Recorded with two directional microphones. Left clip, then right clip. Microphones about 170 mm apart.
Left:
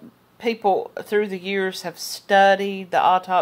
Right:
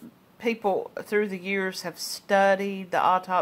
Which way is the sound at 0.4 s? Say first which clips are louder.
Left 5 dB; 10° left (ahead or behind).